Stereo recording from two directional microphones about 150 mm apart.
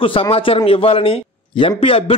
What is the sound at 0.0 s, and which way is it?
Speech, 35° left (ahead or behind).